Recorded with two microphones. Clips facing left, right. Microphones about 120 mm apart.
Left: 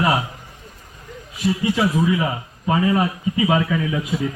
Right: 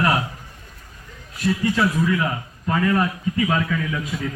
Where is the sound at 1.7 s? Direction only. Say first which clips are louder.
Left 1 dB; 15° left (ahead or behind).